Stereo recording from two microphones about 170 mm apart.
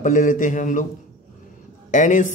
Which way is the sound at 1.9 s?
50° left (ahead or behind).